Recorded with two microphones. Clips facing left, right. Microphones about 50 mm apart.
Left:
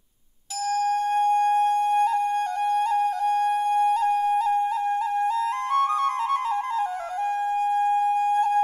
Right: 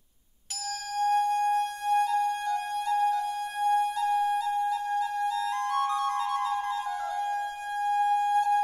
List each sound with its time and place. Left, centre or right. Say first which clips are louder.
1.0 s music: even; left
2.7 s flute: left 3 dB; left
8.3 s music: left 3 dB; left